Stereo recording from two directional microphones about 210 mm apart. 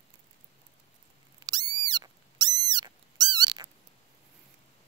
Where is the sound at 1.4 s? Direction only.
20° right (ahead or behind).